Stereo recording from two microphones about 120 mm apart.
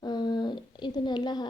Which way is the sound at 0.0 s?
35° left (ahead or behind).